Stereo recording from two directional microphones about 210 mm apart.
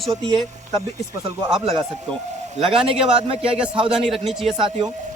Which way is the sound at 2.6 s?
25° right (ahead or behind).